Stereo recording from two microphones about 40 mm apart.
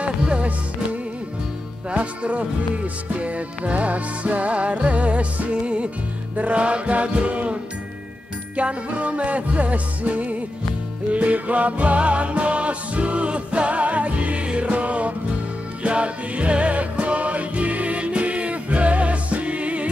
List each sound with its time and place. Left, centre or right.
0.0 s music: right
1.9 s music: right
8.5 s music: right